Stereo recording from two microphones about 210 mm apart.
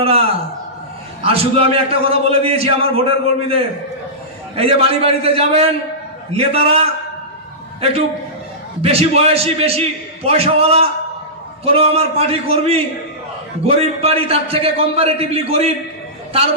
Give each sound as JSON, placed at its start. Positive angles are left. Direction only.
{"t": 0.0, "sound": "a man's voice", "side_deg": -30}
{"t": 8.8, "sound": "a man's voice", "side_deg": -30}